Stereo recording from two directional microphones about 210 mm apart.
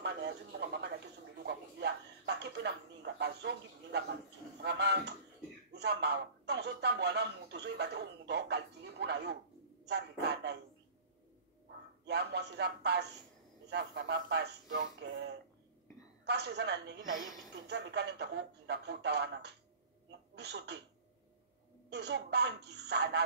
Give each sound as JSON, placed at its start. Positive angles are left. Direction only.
{"t": 0.0, "sound": "a sound", "side_deg": -55}
{"t": 3.2, "sound": "a man's voice", "side_deg": -55}
{"t": 12.1, "sound": "speech", "side_deg": -55}
{"t": 16.3, "sound": "speech", "side_deg": -50}
{"t": 21.8, "sound": "speech", "side_deg": -55}